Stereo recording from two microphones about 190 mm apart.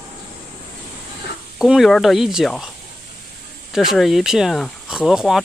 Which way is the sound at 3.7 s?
Centre (ahead or behind).